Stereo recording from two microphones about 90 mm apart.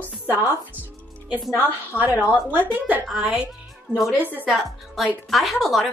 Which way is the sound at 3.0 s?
10° right (ahead or behind).